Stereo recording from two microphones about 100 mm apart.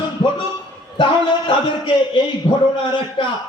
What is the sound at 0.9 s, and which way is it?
Speech, 55° left (ahead or behind).